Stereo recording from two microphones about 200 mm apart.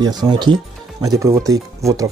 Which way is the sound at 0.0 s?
20° right (ahead or behind).